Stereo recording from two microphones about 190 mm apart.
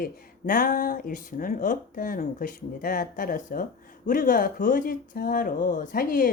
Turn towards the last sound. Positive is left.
turn(degrees=45)  # may be behind; listen again after turning